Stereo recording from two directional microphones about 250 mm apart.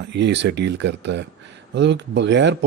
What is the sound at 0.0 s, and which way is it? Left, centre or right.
Speech, right.